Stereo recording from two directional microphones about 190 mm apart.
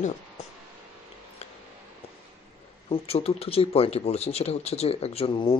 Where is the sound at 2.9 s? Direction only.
30° left (ahead or behind).